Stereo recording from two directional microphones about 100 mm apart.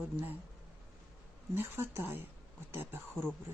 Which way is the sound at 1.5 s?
25° right (ahead or behind).